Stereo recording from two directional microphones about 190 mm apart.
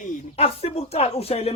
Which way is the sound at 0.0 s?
35° left (ahead or behind).